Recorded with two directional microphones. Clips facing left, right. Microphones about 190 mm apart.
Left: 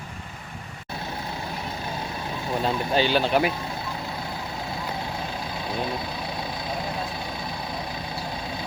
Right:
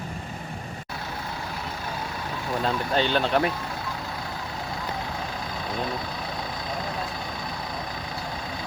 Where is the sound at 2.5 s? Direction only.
15° left (ahead or behind).